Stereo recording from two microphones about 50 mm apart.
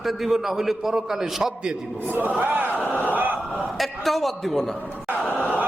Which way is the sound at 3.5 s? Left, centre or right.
Centre.